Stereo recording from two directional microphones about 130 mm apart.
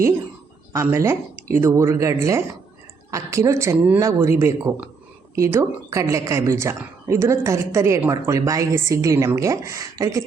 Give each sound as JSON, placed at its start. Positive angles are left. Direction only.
{"t": 0.7, "sound": "a woman's voice", "side_deg": -20}